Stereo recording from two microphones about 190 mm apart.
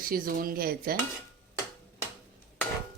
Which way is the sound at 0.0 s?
50° right (ahead or behind).